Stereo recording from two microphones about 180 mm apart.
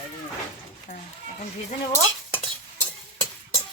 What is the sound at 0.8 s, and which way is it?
Speech, 45° left (ahead or behind).